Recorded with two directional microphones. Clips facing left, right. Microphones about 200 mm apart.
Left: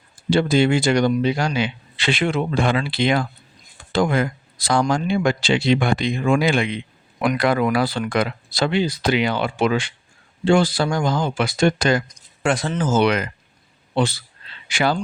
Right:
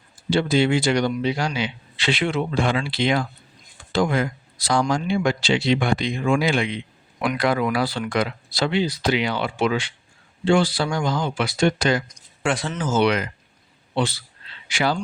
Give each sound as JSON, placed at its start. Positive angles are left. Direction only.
{"t": 0.3, "sound": "speech", "side_deg": 50}
{"t": 12.4, "sound": "speech", "side_deg": 40}